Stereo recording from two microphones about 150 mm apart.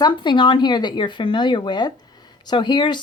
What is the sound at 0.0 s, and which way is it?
Speech, 30° left (ahead or behind).